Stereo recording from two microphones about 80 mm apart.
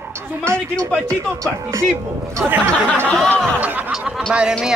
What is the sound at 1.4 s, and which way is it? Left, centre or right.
Speech, right.